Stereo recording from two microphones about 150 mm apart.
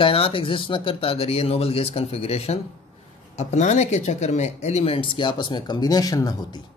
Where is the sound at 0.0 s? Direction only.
40° left (ahead or behind).